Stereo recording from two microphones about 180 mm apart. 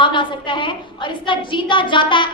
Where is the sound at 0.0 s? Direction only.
25° left (ahead or behind).